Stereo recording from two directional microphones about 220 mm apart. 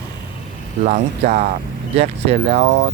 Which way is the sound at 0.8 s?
35° right (ahead or behind).